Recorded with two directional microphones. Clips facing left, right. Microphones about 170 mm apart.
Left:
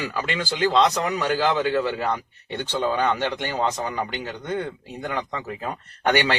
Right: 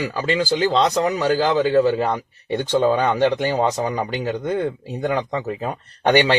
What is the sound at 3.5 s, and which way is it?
Speech, 25° right (ahead or behind).